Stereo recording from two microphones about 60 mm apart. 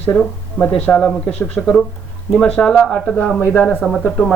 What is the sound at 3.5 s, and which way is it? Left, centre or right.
Speech, left.